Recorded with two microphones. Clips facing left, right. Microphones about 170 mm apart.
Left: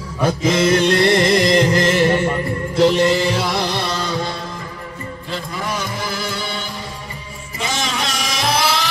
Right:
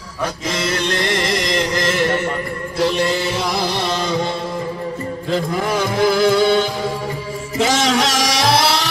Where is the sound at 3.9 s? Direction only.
20° right (ahead or behind).